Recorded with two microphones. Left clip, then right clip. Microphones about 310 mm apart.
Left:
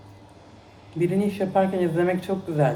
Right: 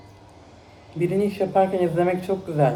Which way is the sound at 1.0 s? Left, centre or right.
Centre.